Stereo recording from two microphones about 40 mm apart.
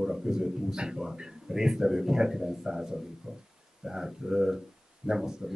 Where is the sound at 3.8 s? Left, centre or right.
Centre.